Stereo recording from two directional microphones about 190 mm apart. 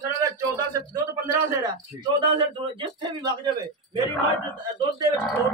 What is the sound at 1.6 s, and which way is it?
Speech, 20° right (ahead or behind).